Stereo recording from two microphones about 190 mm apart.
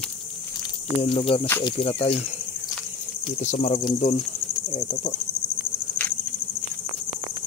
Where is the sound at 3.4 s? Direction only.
40° left (ahead or behind).